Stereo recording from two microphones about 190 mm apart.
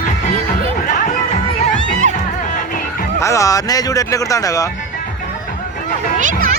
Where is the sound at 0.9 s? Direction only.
40° left (ahead or behind).